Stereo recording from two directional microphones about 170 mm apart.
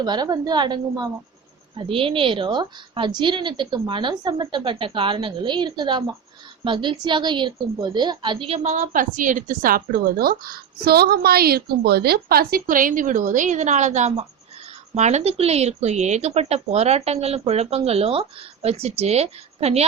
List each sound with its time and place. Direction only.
0.0 s a woman's voice: 25° right (ahead or behind)